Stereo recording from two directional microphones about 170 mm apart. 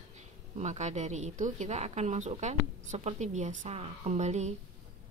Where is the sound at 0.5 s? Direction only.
40° right (ahead or behind).